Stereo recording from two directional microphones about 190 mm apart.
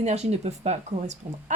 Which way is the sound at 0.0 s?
35° right (ahead or behind).